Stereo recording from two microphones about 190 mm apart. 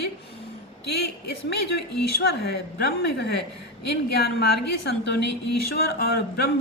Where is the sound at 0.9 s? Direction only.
60° left (ahead or behind).